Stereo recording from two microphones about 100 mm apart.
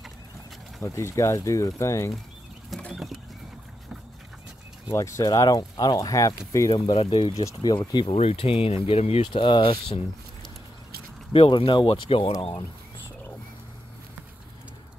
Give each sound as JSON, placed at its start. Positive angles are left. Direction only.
{"t": 0.8, "sound": "speech", "side_deg": 30}
{"t": 2.8, "sound": "a sound", "side_deg": 0}
{"t": 4.9, "sound": "speech", "side_deg": 30}
{"t": 6.9, "sound": "speech", "side_deg": 70}
{"t": 7.3, "sound": "speech", "side_deg": 40}
{"t": 8.1, "sound": "speech", "side_deg": 85}
{"t": 9.5, "sound": "speech", "side_deg": 60}
{"t": 11.3, "sound": "speech", "side_deg": 60}